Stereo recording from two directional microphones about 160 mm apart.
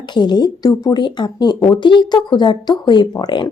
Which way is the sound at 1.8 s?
30° left (ahead or behind).